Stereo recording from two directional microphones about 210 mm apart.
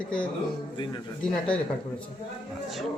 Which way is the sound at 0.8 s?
25° left (ahead or behind).